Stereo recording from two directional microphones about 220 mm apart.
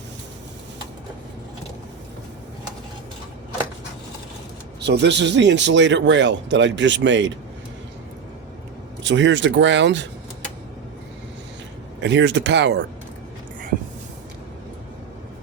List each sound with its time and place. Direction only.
4.8 s speech: 50° right (ahead or behind)
9.0 s speech: 55° right (ahead or behind)
11.9 s speech: 55° right (ahead or behind)